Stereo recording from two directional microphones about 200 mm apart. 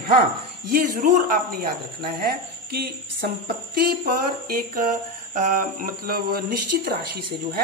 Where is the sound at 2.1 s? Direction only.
50° right (ahead or behind).